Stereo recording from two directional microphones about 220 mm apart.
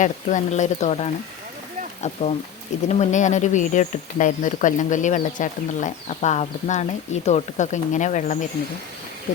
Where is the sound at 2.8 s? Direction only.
30° left (ahead or behind).